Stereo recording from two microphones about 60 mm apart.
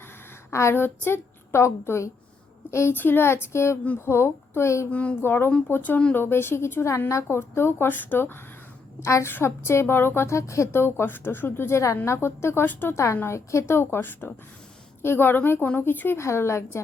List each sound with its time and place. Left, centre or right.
0.5 s a woman's voice: left
2.9 s a woman's voice: left
4.9 s speech: left
5.2 s a woman's voice: left
9.0 s a woman's voice: left
9.3 s a woman's voice: left
10.7 s a woman's voice: left
12.9 s a woman's voice: left
16.1 s a woman's voice: left